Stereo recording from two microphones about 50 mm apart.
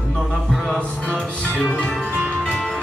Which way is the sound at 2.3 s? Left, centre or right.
Centre.